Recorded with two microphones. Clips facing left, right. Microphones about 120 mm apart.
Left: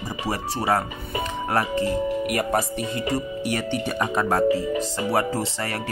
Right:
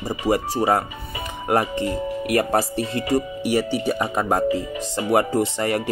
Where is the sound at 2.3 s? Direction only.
35° right (ahead or behind).